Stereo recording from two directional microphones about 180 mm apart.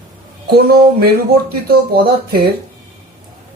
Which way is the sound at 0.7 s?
60° right (ahead or behind).